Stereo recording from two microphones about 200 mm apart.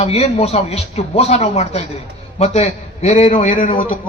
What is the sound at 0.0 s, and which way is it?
A man's voice, 30° left (ahead or behind).